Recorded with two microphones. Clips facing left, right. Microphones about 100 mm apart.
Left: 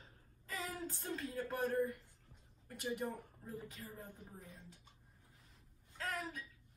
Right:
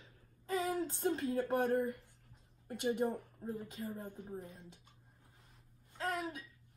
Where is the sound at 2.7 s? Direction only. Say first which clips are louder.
Right 7 dB; 30° right (ahead or behind).